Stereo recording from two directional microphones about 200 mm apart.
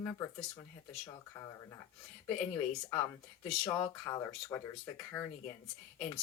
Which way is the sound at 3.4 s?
15° left (ahead or behind).